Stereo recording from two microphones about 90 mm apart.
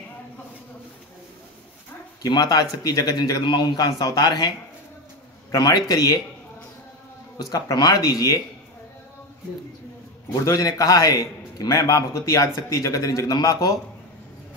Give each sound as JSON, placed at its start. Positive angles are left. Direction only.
{"t": 2.2, "sound": "a man's voice", "side_deg": 50}
{"t": 7.3, "sound": "a man's voice", "side_deg": 40}
{"t": 10.4, "sound": "a man's voice", "side_deg": 40}